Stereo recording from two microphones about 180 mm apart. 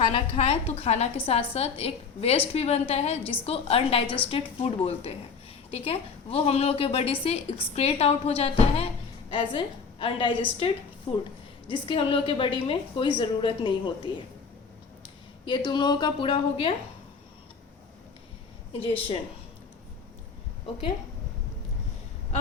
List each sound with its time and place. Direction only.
0.0 s a woman's voice: 35° left (ahead or behind)
11.7 s a woman's voice: 30° left (ahead or behind)
15.4 s a woman's voice: 25° left (ahead or behind)
18.7 s a woman's voice: 30° left (ahead or behind)